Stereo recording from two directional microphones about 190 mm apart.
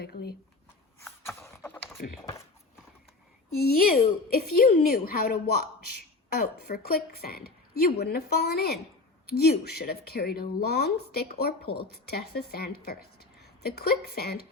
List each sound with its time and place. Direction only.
0.0 s speech: 55° left (ahead or behind)
1.0 s horse: 10° left (ahead or behind)
3.6 s a woman's voice: 50° left (ahead or behind)